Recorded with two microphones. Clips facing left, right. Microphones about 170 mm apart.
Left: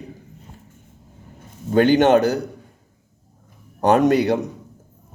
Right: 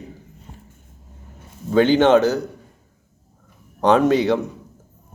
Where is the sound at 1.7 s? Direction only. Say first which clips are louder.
Even; 55° left (ahead or behind).